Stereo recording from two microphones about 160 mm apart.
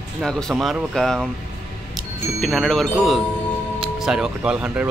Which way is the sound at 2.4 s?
Centre (ahead or behind).